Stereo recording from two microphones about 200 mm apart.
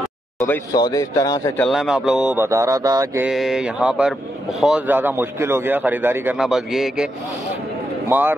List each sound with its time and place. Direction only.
0.7 s speech: 20° left (ahead or behind)
1.6 s a man's voice: centre (ahead or behind); by 3.3 s 15° right (ahead or behind)
3.3 s mantra: centre (ahead or behind)
4.6 s a man's voice: 5° right (ahead or behind)
8.1 s a man's voice: 10° right (ahead or behind)